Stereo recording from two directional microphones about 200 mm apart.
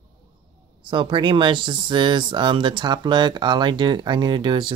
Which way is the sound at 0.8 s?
25° right (ahead or behind).